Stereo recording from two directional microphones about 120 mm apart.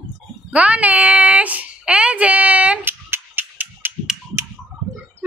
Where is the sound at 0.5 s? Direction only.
10° right (ahead or behind).